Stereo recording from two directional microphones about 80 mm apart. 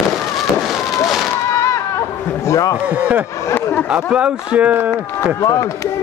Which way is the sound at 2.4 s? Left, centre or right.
Left.